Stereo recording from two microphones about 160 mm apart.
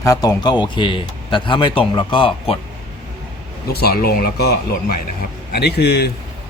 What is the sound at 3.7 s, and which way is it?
Speech, 70° left (ahead or behind).